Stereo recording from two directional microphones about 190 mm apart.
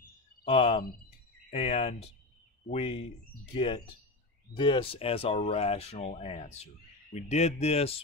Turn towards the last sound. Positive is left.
turn(degrees=30)  # may be behind; listen again after turning